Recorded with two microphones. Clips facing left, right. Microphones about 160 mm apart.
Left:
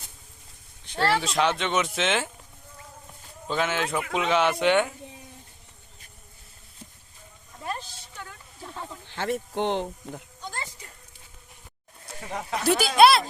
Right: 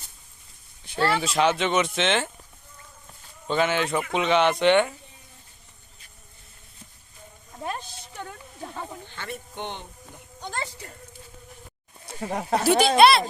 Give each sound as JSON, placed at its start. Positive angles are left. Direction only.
{"t": 0.9, "sound": "speech", "side_deg": -5}
{"t": 3.4, "sound": "speech", "side_deg": 0}
{"t": 9.1, "sound": "speech", "side_deg": 85}
{"t": 12.3, "sound": "speech", "side_deg": -35}
{"t": 12.6, "sound": "speech", "side_deg": 0}